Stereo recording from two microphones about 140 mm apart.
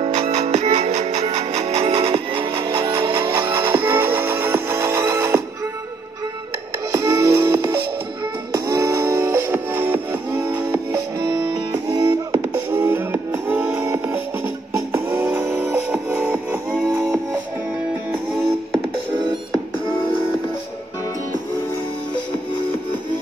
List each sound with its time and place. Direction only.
0.0 s music: 50° right (ahead or behind); by 3.0 s 25° right (ahead or behind)
3.1 s music: 15° right (ahead or behind)
6.9 s music: 20° right (ahead or behind)
12.3 s music: 15° right (ahead or behind)
16.9 s music: 20° right (ahead or behind)